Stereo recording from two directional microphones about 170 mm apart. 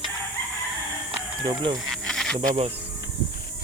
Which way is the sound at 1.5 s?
30° right (ahead or behind).